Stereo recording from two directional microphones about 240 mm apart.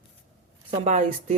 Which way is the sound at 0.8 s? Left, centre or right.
Right.